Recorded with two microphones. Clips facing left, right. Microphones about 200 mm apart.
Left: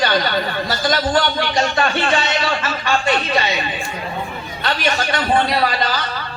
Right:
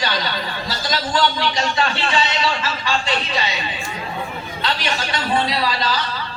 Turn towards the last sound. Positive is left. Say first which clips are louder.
# left 3 dB
turn(degrees=55)  # may be behind; listen again after turning